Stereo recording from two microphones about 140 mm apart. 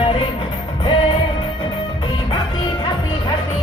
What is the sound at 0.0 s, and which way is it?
Music, 35° left (ahead or behind).